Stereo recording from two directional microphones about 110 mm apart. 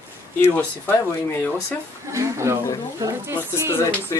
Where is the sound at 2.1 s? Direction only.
25° right (ahead or behind).